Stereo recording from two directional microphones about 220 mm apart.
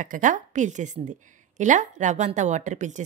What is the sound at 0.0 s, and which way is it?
A woman's voice, 35° right (ahead or behind).